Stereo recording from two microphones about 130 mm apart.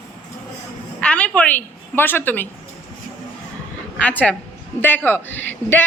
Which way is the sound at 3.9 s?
10° left (ahead or behind).